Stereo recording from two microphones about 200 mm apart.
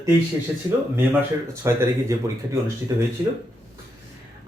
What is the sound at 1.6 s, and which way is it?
Speech, 15° right (ahead or behind).